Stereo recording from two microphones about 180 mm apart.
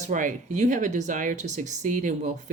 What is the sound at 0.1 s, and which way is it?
Speech, 45° right (ahead or behind).